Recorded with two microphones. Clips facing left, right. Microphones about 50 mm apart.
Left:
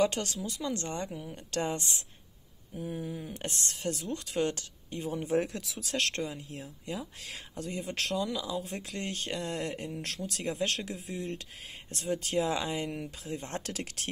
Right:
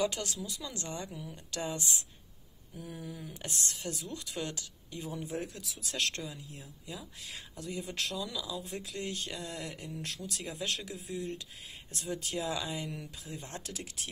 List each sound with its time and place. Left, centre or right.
0.0 s speech: left
5.2 s speech: left
5.9 s speech: left
7.2 s speech: left
10.9 s speech: left
11.9 s speech: left
13.6 s speech: left